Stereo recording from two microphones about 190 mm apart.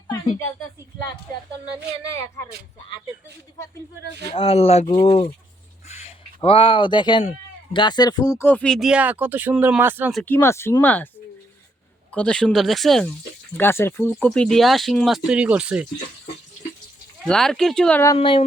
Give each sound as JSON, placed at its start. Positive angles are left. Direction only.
{"t": 4.4, "sound": "speech", "side_deg": 30}
{"t": 10.2, "sound": "speech", "side_deg": 10}
{"t": 12.1, "sound": "speech", "side_deg": 5}
{"t": 13.6, "sound": "speech", "side_deg": 10}
{"t": 17.2, "sound": "speech", "side_deg": 0}
{"t": 18.2, "sound": "speech", "side_deg": 30}